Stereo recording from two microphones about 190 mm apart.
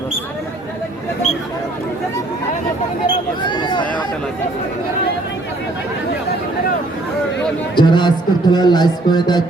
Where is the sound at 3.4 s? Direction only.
25° left (ahead or behind).